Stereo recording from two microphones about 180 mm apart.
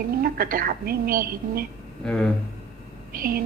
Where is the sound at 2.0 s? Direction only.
5° left (ahead or behind).